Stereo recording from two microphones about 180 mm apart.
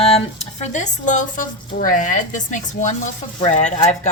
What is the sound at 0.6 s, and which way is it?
A woman's voice, 40° left (ahead or behind).